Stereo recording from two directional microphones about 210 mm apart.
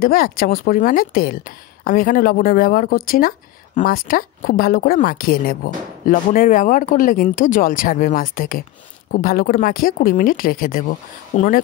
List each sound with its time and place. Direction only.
0.0 s speech: 45° left (ahead or behind)